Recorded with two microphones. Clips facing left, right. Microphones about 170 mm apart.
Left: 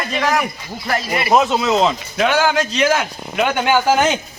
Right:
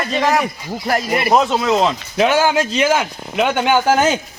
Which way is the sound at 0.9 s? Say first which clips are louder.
Right 3 dB; 45° right (ahead or behind).